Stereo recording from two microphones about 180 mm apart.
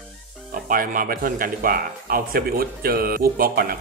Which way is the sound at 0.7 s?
50° right (ahead or behind).